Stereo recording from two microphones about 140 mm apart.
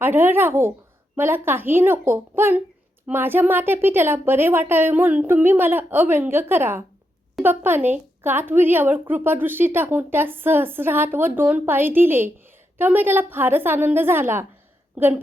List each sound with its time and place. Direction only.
0.0 s a woman's voice: 15° right (ahead or behind)